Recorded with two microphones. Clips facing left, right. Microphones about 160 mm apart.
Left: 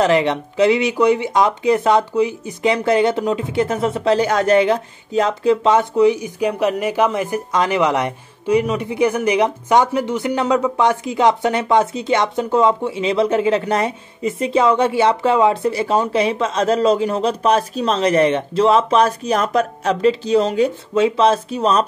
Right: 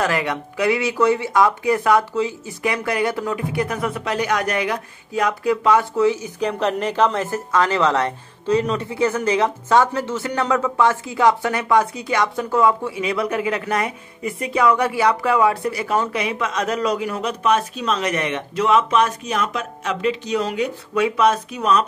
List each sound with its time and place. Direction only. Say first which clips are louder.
0.0 s speech: left 6 dB; 25° left (ahead or behind)